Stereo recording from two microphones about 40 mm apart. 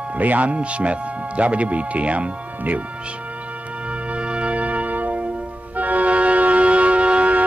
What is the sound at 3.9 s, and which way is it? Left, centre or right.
Music, right.